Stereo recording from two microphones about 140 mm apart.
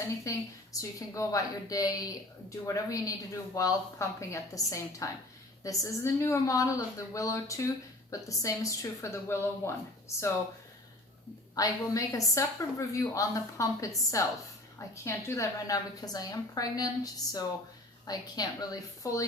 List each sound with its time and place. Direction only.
0.3 s speech: 25° left (ahead or behind)
11.5 s speech: 25° left (ahead or behind)